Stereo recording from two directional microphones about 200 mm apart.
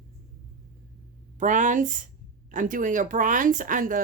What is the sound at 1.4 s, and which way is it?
Speech, 40° right (ahead or behind).